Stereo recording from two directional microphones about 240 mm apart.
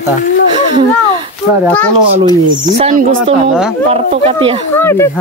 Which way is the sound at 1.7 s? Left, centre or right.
Centre.